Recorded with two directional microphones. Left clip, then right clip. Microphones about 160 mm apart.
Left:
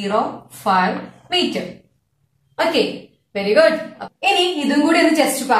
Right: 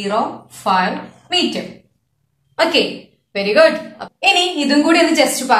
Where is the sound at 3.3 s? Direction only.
30° right (ahead or behind).